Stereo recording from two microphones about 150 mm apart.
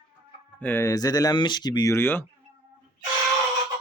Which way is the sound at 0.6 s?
15° left (ahead or behind).